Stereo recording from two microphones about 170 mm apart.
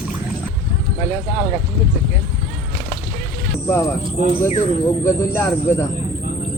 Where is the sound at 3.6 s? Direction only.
15° left (ahead or behind).